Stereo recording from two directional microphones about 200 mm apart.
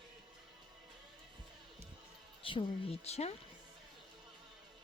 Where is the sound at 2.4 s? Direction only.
25° left (ahead or behind).